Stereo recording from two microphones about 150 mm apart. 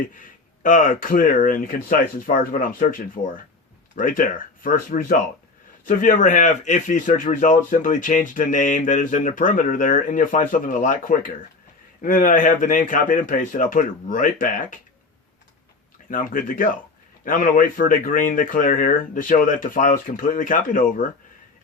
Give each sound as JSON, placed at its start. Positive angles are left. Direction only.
{"t": 0.0, "sound": "speech", "side_deg": 60}
{"t": 3.9, "sound": "speech", "side_deg": 65}
{"t": 16.0, "sound": "speech", "side_deg": 65}